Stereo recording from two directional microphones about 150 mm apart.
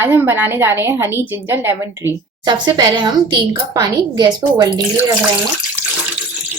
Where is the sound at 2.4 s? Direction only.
30° right (ahead or behind).